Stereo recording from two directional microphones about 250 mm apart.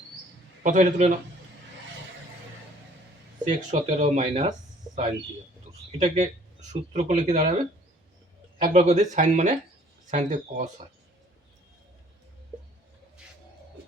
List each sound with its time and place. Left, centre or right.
0.6 s a man's voice: right
3.4 s speech: right
6.0 s speech: right
8.6 s speech: right